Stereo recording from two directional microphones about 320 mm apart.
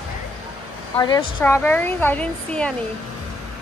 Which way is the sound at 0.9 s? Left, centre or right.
Centre.